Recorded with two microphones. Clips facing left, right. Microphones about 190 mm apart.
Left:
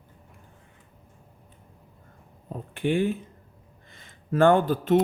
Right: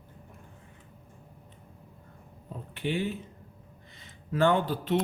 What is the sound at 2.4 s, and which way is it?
Speech, 50° left (ahead or behind).